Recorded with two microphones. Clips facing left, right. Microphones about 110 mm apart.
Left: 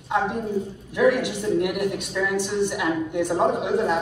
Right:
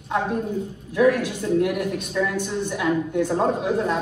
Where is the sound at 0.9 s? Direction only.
20° left (ahead or behind).